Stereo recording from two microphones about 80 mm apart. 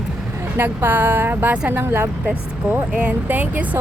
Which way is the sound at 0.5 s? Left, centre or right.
Right.